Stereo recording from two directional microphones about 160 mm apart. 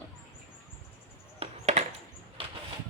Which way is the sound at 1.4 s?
45° right (ahead or behind).